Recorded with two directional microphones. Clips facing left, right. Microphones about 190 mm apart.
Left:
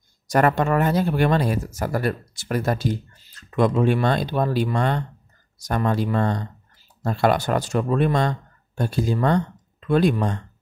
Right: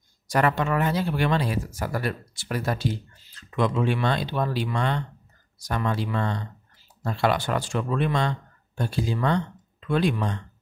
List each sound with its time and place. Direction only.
0.3 s speech: 45° left (ahead or behind)